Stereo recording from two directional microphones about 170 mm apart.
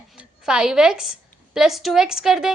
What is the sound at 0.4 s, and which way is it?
A woman's voice, 5° right (ahead or behind).